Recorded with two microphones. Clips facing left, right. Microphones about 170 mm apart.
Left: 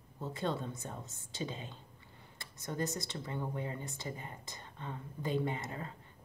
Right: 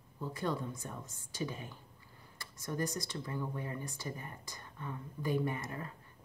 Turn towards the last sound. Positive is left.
turn(degrees=25)  # may be behind; listen again after turning